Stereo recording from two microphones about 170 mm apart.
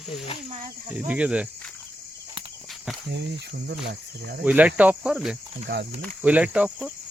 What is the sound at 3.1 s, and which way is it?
Speech, 85° right.